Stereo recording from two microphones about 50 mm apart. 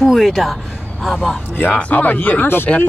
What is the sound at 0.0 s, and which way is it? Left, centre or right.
Speech, centre.